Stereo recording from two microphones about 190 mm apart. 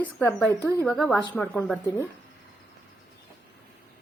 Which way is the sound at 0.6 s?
20° left (ahead or behind).